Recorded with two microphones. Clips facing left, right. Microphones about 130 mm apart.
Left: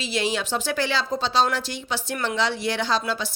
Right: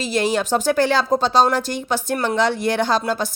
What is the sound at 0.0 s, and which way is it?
A woman's voice, 45° right (ahead or behind).